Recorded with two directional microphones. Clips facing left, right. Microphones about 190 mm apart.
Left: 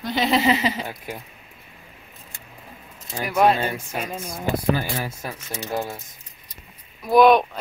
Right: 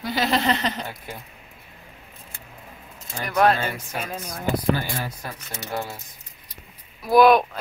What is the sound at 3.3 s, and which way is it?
Speech, 5° left (ahead or behind).